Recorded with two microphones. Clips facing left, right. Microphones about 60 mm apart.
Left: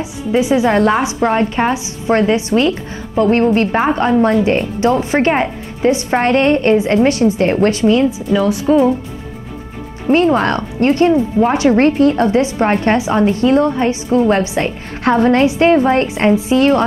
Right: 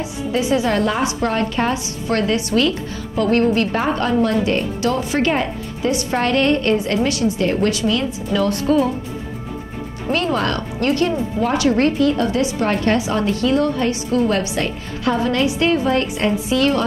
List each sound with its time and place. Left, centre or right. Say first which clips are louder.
0.0 s a woman's voice: left 5 dB; centre
8.3 s speech: left 1 dB; centre
10.0 s speech: left 7 dB; left
15.0 s a woman's voice: left 7 dB; left